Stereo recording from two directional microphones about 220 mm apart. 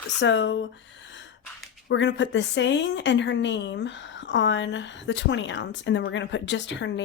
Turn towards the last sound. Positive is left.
turn(degrees=55)  # may be behind; listen again after turning